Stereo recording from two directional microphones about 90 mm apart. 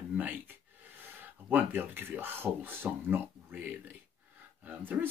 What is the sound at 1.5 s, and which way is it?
Speech, 20° right (ahead or behind).